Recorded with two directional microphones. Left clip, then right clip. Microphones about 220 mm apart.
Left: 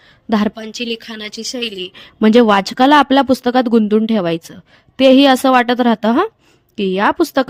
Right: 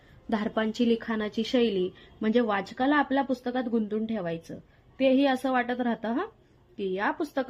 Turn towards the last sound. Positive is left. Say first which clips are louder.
# left 15 dB
turn(degrees=50)  # may be behind; listen again after turning